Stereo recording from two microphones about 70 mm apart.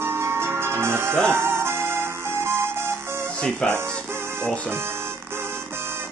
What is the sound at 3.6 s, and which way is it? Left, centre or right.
Speech, centre.